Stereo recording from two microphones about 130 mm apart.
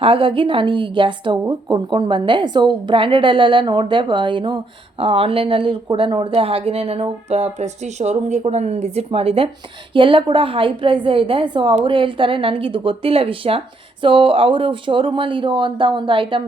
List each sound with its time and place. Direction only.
0.0 s a woman's voice: 45° right (ahead or behind)